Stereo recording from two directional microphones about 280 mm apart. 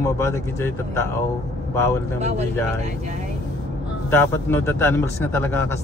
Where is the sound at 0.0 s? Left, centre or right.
Centre.